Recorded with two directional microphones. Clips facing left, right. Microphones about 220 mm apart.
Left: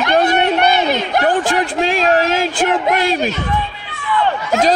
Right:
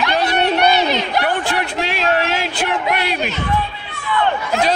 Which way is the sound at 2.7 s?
45° left (ahead or behind).